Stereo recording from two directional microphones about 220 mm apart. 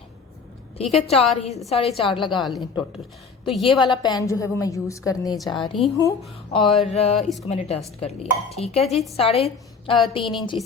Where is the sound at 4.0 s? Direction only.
15° left (ahead or behind).